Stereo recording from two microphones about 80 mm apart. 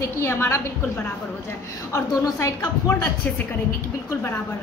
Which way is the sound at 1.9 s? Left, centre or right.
Left.